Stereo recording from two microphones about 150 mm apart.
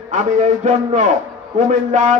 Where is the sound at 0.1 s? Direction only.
55° right (ahead or behind).